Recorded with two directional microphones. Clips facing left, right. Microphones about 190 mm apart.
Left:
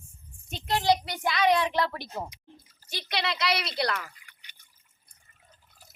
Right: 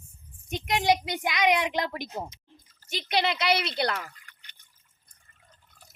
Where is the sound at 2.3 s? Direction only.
10° left (ahead or behind).